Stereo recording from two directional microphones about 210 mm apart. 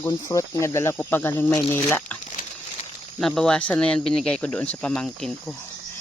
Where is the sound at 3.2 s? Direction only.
Centre (ahead or behind).